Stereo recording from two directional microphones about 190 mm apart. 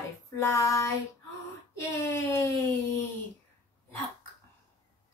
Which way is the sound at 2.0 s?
15° left (ahead or behind).